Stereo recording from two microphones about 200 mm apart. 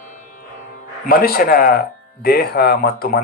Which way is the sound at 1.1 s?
50° left (ahead or behind).